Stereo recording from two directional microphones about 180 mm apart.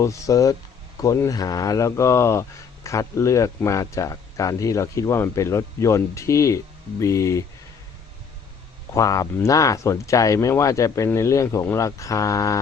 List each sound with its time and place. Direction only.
0.0 s speech: 15° left (ahead or behind)
8.9 s speech: 20° left (ahead or behind)